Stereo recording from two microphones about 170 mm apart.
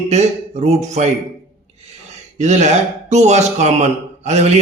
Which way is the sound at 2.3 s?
45° right (ahead or behind).